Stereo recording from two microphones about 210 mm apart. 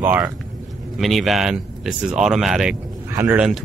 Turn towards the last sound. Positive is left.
turn(degrees=-5)  # may be behind; listen again after turning